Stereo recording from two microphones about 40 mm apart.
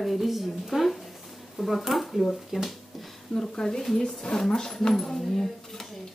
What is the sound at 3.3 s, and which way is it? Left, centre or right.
A woman's voice, centre.